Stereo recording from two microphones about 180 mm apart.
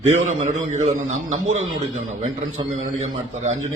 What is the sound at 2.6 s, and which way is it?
Speech, 30° right (ahead or behind).